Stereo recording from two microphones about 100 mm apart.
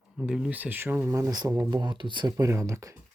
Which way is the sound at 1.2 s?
40° right (ahead or behind).